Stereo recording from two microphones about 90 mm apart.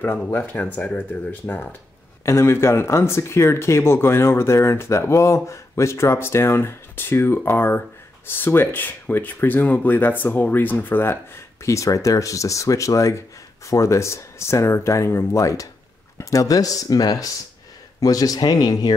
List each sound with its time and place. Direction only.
0.1 s speech: 15° left (ahead or behind)
2.2 s speech: 30° left (ahead or behind)